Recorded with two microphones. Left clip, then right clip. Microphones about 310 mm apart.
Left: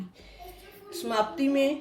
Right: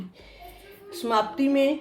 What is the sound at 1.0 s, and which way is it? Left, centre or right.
Speech, right.